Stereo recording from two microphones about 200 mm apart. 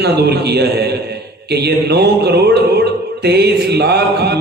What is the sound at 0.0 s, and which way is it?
A man's voice, 55° right (ahead or behind).